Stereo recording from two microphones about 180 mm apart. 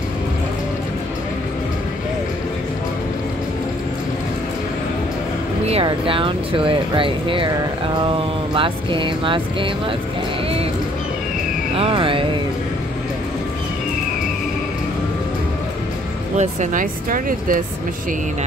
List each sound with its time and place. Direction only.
5.7 s speech: 30° right (ahead or behind)
8.5 s speech: 30° right (ahead or behind)
11.8 s speech: 30° right (ahead or behind)
16.3 s speech: 50° right (ahead or behind)